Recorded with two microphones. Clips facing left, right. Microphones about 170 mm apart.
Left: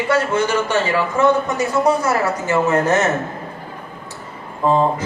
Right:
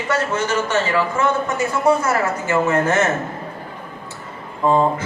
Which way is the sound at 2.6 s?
20° left (ahead or behind).